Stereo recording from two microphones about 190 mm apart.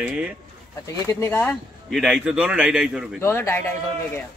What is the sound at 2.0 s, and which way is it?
A man's voice, centre (ahead or behind).